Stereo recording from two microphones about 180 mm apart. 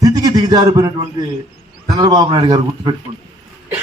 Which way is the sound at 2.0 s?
25° right (ahead or behind).